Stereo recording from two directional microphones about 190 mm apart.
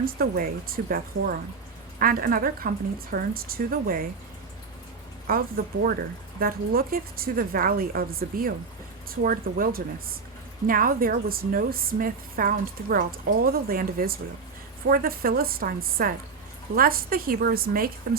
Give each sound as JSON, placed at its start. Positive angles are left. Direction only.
{"t": 0.0, "sound": "a woman's voice", "side_deg": -50}
{"t": 5.3, "sound": "a woman's voice", "side_deg": -50}